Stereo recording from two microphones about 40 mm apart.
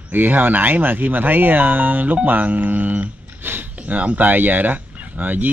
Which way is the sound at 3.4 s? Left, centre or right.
Right.